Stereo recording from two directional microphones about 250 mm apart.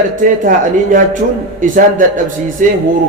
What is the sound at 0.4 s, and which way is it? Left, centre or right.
A man's voice, right.